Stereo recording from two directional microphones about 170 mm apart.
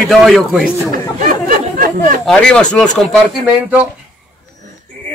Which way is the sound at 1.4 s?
55° right (ahead or behind).